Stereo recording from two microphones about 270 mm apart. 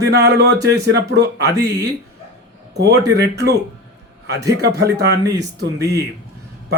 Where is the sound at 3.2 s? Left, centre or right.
Right.